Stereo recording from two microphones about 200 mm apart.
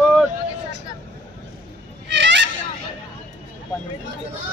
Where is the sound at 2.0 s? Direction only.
60° right (ahead or behind).